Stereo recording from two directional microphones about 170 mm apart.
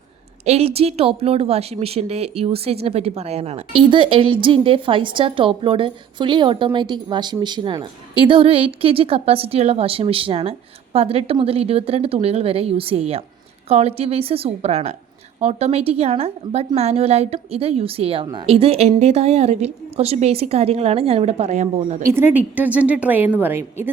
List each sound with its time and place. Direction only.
0.4 s a woman's voice: 40° right (ahead or behind)
22.0 s a woman's voice: 15° right (ahead or behind)